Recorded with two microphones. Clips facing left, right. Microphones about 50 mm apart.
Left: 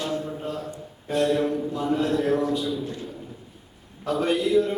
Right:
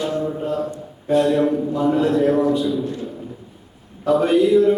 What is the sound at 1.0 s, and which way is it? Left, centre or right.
A man's voice, centre.